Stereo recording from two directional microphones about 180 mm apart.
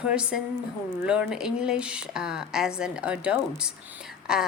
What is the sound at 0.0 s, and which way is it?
Speech, 5° right (ahead or behind).